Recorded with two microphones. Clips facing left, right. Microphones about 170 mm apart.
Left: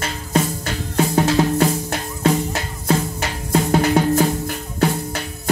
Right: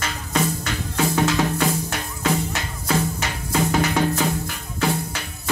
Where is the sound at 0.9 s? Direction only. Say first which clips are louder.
Left 4 dB; 35° left (ahead or behind).